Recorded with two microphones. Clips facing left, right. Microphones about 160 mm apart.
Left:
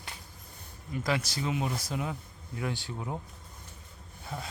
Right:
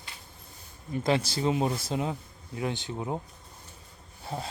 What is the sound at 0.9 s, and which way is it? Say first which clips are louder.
Speech: right 5 dB; 30° right (ahead or behind).